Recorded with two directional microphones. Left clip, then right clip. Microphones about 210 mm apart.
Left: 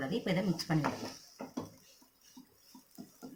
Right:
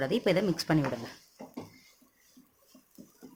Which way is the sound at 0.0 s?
50° right (ahead or behind).